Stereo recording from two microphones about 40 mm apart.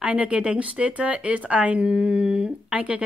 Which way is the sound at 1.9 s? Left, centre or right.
Right.